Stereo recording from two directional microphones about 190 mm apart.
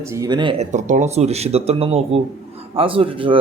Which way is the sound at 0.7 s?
40° right (ahead or behind).